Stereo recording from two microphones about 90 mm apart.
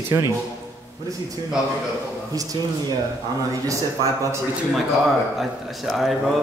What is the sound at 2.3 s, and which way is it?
Speech, 40° right (ahead or behind).